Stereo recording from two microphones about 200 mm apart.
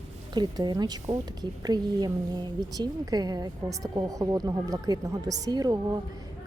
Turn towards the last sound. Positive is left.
turn(degrees=-20)  # may be behind; listen again after turning